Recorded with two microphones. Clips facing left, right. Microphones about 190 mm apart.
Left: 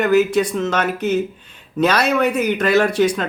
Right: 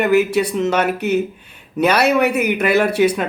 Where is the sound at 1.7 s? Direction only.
10° right (ahead or behind).